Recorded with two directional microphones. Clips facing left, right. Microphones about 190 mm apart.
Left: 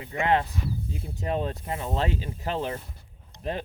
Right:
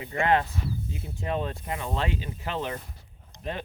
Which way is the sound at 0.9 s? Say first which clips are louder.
Left 2 dB; 35° left (ahead or behind).